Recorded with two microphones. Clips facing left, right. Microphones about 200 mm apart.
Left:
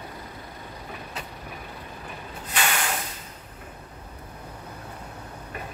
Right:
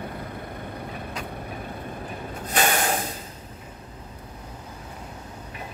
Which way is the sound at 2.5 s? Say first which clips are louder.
Right 5 dB; 45° right (ahead or behind).